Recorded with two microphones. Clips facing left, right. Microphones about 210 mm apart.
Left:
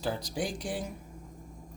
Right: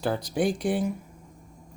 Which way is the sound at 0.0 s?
60° right (ahead or behind).